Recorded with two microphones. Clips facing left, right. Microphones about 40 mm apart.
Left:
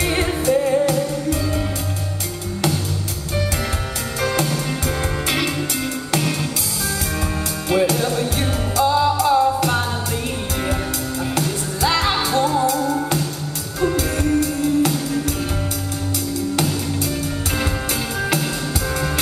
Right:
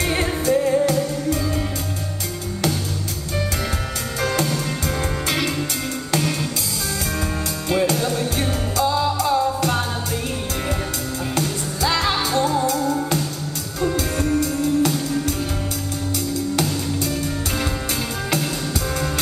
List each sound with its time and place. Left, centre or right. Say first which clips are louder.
0.0 s music: left 2 dB; centre
4.2 s music: left 1 dB; centre
7.7 s music: left 2 dB; centre
11.3 s music: left 1 dB; centre
16.5 s music: left 1 dB; centre